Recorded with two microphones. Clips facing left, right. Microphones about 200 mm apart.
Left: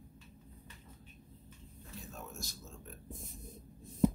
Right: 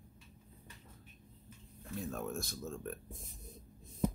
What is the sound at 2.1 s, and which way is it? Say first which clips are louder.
Speech: right 8 dB; 55° right (ahead or behind).